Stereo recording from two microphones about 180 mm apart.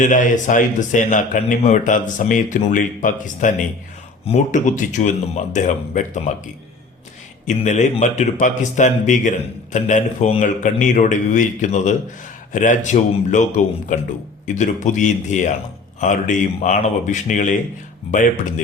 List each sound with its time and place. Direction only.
0.0 s a man's voice: 45° left (ahead or behind)
7.4 s a man's voice: 45° left (ahead or behind)